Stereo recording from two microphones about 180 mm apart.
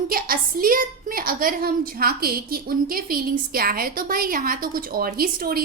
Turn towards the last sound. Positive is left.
turn(degrees=-55)  # may be behind; listen again after turning